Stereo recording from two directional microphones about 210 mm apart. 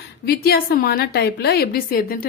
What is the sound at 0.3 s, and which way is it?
A woman's voice, 45° left (ahead or behind).